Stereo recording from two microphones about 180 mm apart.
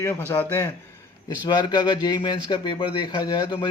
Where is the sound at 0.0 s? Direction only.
10° left (ahead or behind).